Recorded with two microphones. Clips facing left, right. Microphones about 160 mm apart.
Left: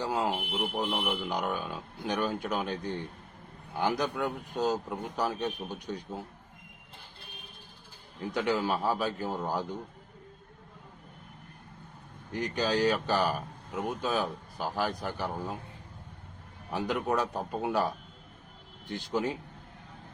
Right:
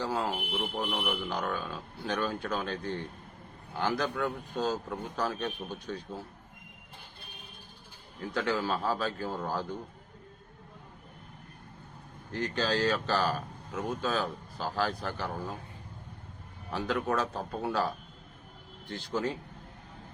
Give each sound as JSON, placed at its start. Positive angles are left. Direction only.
{"t": 0.0, "sound": "speech", "side_deg": 15}
{"t": 8.3, "sound": "speech", "side_deg": 15}
{"t": 12.3, "sound": "speech", "side_deg": 15}
{"t": 16.7, "sound": "speech", "side_deg": 15}